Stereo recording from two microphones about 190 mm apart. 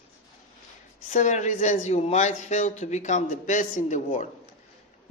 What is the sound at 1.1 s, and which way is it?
A man's voice, 40° left (ahead or behind).